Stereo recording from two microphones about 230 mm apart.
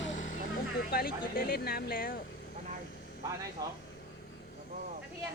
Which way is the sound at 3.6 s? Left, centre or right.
Centre.